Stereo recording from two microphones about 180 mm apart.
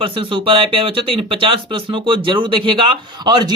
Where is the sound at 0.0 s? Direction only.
30° right (ahead or behind).